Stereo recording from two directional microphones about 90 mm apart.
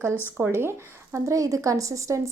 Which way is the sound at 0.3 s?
25° right (ahead or behind).